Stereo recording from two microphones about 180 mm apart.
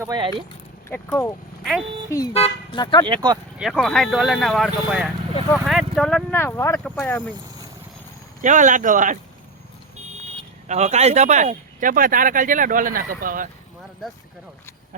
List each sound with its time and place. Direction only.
0.0 s speech: 25° right (ahead or behind)
0.9 s speech: 10° left (ahead or behind)
2.3 s speech: 30° left (ahead or behind)
3.1 s speech: 25° right (ahead or behind)
3.6 s speech: centre (ahead or behind)
6.4 s speech: 15° left (ahead or behind)
8.4 s speech: 45° right (ahead or behind)
10.7 s speech: 40° right (ahead or behind)